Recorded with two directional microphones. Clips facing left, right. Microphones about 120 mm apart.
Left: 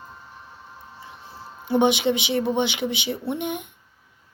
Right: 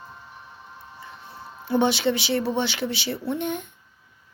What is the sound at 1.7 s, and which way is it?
Speech, 20° left (ahead or behind).